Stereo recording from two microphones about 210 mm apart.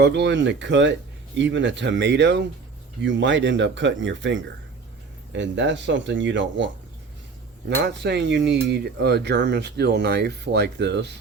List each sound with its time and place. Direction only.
0.0 s speech: 55° right (ahead or behind)
7.8 s speech: 55° right (ahead or behind)